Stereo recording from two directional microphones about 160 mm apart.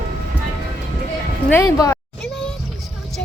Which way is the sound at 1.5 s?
20° left (ahead or behind).